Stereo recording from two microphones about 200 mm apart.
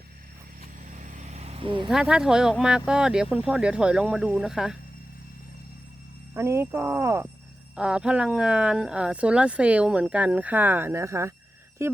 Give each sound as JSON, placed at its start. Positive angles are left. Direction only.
{"t": 0.9, "sound": "vehicle", "side_deg": -40}
{"t": 1.9, "sound": "speech", "side_deg": -5}
{"t": 6.3, "sound": "speech", "side_deg": -15}